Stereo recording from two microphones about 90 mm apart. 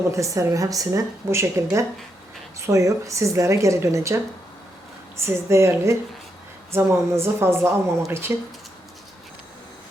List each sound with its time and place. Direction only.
0.1 s a woman's voice: 35° right (ahead or behind)